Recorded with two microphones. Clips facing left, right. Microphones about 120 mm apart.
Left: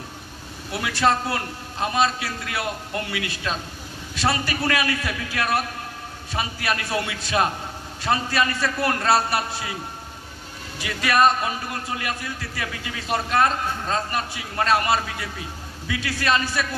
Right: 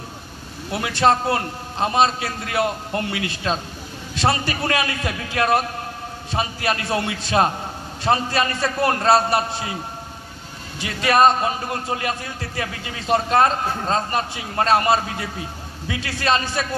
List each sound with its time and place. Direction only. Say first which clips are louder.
0.7 s a man's voice: right 3 dB; 30° right (ahead or behind)
10.8 s a man's voice: right 3 dB; 30° right (ahead or behind)